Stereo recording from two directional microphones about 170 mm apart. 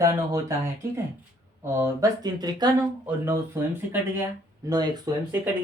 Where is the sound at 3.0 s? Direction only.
15° right (ahead or behind).